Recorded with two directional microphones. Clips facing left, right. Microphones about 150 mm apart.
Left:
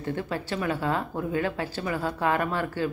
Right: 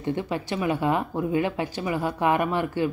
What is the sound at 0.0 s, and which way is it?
Speech, 15° right (ahead or behind).